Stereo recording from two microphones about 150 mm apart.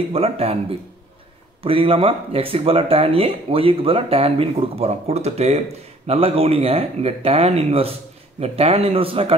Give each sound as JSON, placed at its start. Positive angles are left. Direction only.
{"t": 0.1, "sound": "speech", "side_deg": -40}